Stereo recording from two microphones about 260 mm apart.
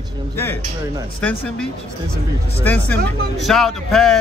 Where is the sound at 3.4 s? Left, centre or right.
Centre.